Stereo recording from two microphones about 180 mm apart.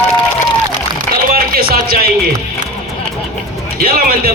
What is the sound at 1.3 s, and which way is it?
Music, 55° right (ahead or behind).